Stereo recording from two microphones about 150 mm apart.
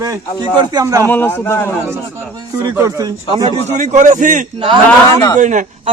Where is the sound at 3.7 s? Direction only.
55° right (ahead or behind).